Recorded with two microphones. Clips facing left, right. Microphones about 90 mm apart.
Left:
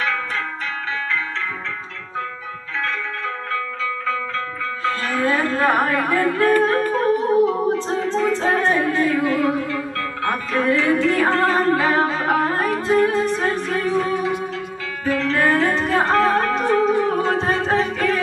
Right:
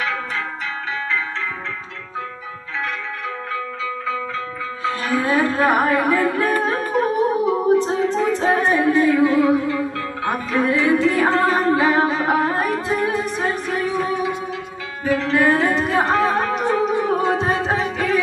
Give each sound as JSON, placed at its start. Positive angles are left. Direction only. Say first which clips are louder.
{"t": 4.8, "sound": "music", "louder": "even", "side_deg": -15}